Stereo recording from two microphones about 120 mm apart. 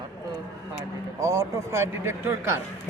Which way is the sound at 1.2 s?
25° right (ahead or behind).